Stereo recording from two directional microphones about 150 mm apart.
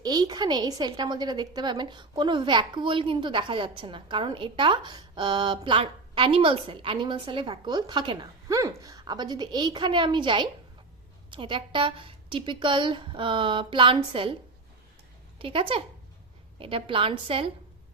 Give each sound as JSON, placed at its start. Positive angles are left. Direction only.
{"t": 0.0, "sound": "a woman's voice", "side_deg": -25}
{"t": 15.4, "sound": "a woman's voice", "side_deg": -35}